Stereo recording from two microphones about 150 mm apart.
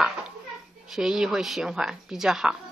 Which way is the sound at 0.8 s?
5° right (ahead or behind).